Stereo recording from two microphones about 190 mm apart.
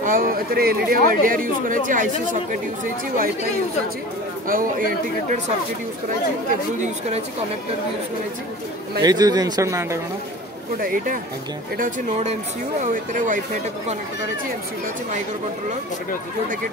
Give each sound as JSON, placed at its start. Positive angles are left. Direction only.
{"t": 0.0, "sound": "speech", "side_deg": -45}
{"t": 4.5, "sound": "speech", "side_deg": -45}
{"t": 6.8, "sound": "speech", "side_deg": -35}
{"t": 9.0, "sound": "speech", "side_deg": -20}
{"t": 10.8, "sound": "speech", "side_deg": -50}